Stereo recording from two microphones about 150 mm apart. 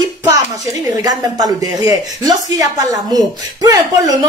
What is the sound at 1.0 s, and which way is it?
Speech, 25° right (ahead or behind).